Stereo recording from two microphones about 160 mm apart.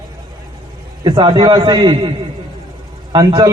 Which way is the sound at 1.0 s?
30° right (ahead or behind).